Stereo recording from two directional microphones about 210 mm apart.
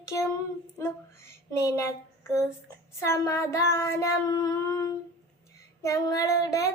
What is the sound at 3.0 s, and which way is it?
Child singing, 15° left (ahead or behind).